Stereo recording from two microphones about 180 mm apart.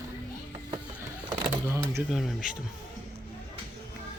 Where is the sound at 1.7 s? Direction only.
15° right (ahead or behind).